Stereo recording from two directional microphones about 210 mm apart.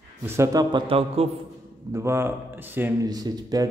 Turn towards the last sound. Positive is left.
turn(degrees=-15)  # may be behind; listen again after turning